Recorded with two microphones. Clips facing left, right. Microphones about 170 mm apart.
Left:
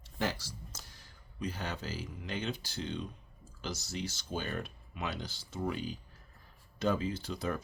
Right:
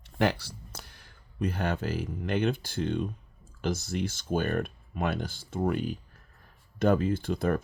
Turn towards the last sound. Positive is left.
turn(degrees=-55)  # may be behind; listen again after turning